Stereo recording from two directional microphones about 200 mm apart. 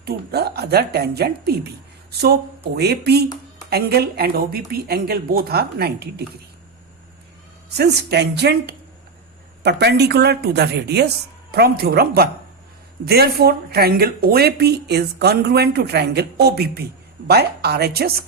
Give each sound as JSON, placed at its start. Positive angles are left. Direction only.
{"t": 0.0, "sound": "speech", "side_deg": -55}
{"t": 7.7, "sound": "a woman's voice", "side_deg": -55}